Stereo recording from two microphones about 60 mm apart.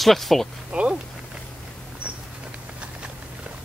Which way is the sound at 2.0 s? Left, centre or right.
Centre.